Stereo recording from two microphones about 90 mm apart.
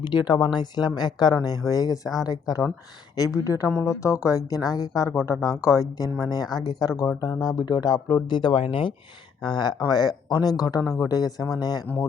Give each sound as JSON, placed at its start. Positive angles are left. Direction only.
{"t": 0.0, "sound": "a woman's voice", "side_deg": 55}
{"t": 9.4, "sound": "speech", "side_deg": 55}